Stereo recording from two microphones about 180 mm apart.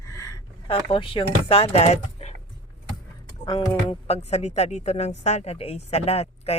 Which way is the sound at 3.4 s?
25° left (ahead or behind).